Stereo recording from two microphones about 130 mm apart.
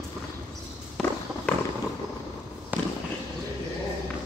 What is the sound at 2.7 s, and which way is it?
Fireworks, 15° right (ahead or behind).